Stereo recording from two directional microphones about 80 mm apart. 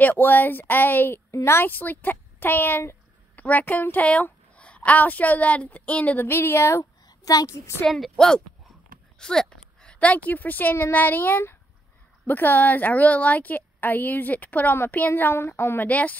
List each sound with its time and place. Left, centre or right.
0.0 s a woman's voice: left
6.2 s a sound: left
7.1 s a child's voice: left
7.8 s a woman's voice: centre